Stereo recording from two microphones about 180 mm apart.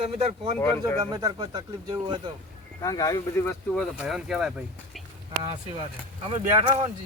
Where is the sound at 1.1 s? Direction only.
20° right (ahead or behind).